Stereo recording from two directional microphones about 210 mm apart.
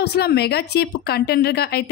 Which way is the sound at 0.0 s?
50° left (ahead or behind).